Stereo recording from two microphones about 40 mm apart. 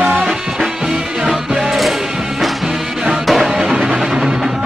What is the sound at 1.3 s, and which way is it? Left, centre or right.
Music, centre.